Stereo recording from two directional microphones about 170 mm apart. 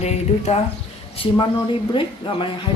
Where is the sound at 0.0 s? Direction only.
40° left (ahead or behind).